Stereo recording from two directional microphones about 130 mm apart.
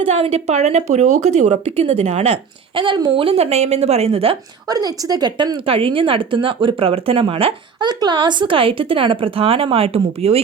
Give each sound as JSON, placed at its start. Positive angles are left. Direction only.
{"t": 0.0, "sound": "a woman's voice", "side_deg": -55}
{"t": 4.7, "sound": "speech", "side_deg": -30}
{"t": 5.6, "sound": "speech", "side_deg": -45}